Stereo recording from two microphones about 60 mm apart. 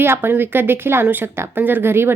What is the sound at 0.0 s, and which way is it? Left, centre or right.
A woman's voice, right.